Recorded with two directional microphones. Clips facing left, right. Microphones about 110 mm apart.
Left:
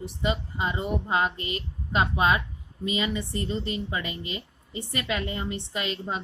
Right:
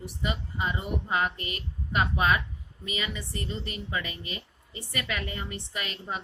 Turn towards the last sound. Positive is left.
turn(degrees=25)  # may be behind; listen again after turning